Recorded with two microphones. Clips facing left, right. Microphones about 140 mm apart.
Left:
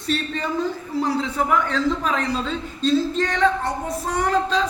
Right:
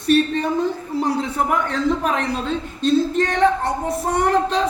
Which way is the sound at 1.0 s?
55° right (ahead or behind).